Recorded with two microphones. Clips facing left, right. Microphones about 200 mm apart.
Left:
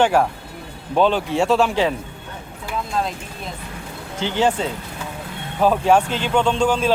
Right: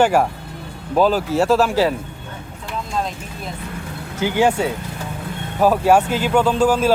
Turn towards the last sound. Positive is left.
turn(degrees=-5)  # may be behind; listen again after turning